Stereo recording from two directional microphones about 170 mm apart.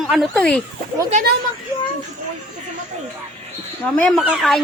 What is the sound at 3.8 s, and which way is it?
Speech, 5° left (ahead or behind).